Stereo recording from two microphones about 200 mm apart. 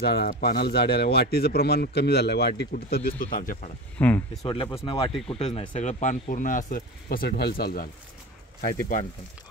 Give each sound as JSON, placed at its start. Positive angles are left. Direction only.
{"t": 0.0, "sound": "speech", "side_deg": 50}
{"t": 4.0, "sound": "speech", "side_deg": 10}
{"t": 4.5, "sound": "speech", "side_deg": 25}